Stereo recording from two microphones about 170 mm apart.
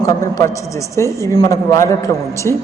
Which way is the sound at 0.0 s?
20° left (ahead or behind).